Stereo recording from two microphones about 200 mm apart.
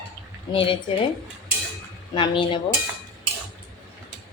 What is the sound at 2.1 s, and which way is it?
Speech, 25° left (ahead or behind).